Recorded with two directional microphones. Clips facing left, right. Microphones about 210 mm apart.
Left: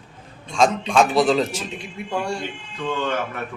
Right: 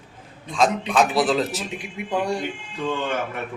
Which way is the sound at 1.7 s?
15° right (ahead or behind).